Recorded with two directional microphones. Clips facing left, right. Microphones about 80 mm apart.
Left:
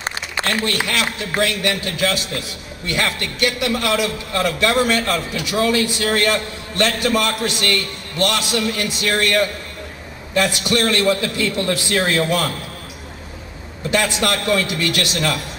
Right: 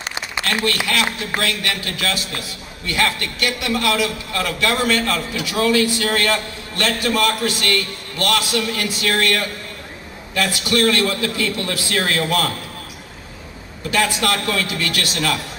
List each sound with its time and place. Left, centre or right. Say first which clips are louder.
0.7 s a man's voice: right 1 dB; left
13.8 s a man's voice: even; left